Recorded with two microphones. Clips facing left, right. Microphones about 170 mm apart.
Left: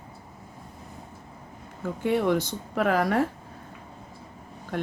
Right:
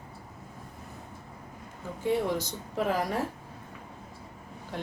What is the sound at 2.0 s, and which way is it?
Speech, 70° left (ahead or behind).